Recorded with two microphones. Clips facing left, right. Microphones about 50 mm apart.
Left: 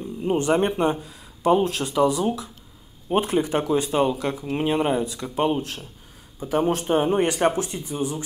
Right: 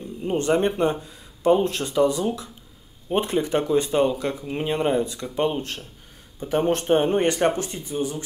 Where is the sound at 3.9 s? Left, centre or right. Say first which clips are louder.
Right 1 dB; centre.